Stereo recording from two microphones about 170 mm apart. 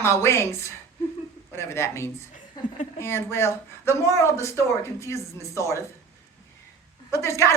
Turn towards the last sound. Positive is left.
turn(degrees=15)  # may be behind; listen again after turning